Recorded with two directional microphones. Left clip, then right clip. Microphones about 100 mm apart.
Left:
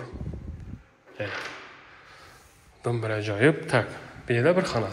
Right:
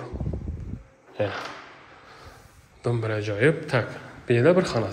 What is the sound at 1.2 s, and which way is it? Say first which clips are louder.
Speech: right 6 dB; 35° right (ahead or behind).